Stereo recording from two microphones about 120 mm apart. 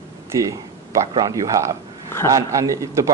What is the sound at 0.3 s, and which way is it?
Speech, 25° right (ahead or behind).